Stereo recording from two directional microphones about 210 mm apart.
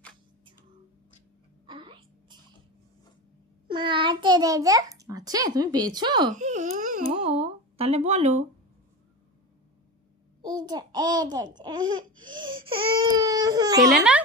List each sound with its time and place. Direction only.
1.7 s whispering: 25° right (ahead or behind)
3.6 s a child's voice: 25° right (ahead or behind)
6.3 s babbling: 35° right (ahead or behind)
7.1 s a sound: 30° right (ahead or behind)
10.4 s a child's voice: 20° right (ahead or behind)
12.2 s laughter: 20° right (ahead or behind)
12.6 s speech: 20° right (ahead or behind)
13.9 s speech: 5° right (ahead or behind)